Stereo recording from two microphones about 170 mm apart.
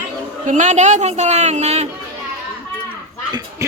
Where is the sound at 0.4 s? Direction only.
45° right (ahead or behind).